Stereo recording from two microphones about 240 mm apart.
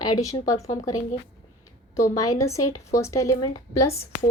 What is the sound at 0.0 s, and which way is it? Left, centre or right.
Speech, centre.